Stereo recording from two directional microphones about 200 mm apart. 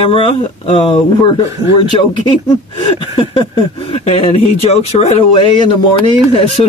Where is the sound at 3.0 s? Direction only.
25° left (ahead or behind).